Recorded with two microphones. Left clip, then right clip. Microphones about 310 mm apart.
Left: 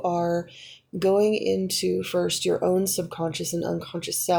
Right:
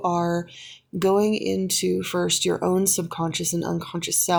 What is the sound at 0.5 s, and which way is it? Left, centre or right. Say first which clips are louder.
Speech: right 2 dB; right.